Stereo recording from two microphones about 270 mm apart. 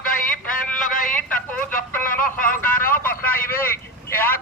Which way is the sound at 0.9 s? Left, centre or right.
Left.